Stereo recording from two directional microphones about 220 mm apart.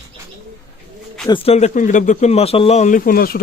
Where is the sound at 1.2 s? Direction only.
25° left (ahead or behind).